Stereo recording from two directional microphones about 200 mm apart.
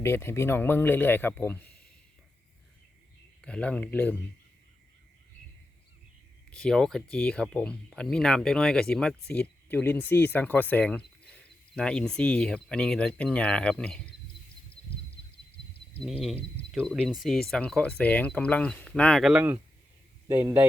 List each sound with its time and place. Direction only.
0.0 s speech: 10° left (ahead or behind)
3.4 s speech: 5° left (ahead or behind)
6.5 s speech: 5° left (ahead or behind)
16.7 s a man's voice: centre (ahead or behind)